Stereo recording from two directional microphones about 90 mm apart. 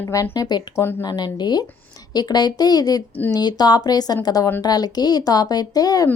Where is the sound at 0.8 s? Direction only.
25° left (ahead or behind).